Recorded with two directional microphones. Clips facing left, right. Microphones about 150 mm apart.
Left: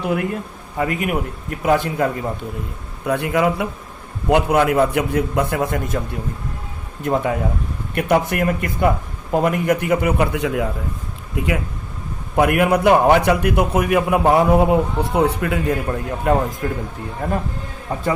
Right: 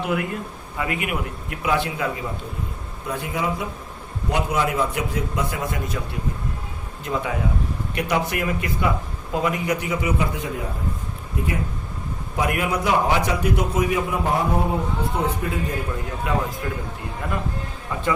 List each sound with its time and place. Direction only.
0.8 s a man's voice: 40° left (ahead or behind)
3.1 s a man's voice: 65° left (ahead or behind)
7.0 s a man's voice: 50° left (ahead or behind); by 10.7 s 75° left (ahead or behind)
11.3 s speech: 90° left
12.4 s a man's voice: 60° left (ahead or behind)
16.6 s a man's voice: 40° left (ahead or behind)